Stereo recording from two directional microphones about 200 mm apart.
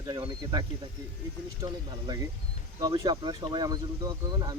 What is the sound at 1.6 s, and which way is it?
Speech, 20° right (ahead or behind).